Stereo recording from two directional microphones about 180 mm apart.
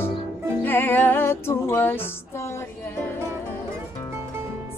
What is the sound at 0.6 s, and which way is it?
Music, 10° left (ahead or behind).